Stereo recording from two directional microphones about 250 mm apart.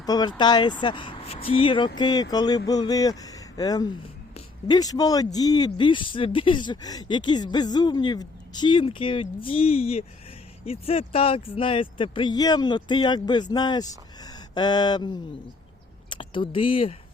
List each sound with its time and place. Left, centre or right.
0.0 s speech: centre